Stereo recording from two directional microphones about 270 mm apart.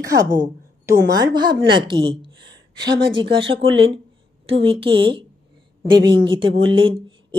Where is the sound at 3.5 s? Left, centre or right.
Right.